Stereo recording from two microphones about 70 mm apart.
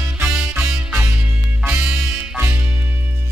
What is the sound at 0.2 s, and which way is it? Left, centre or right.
Music, centre.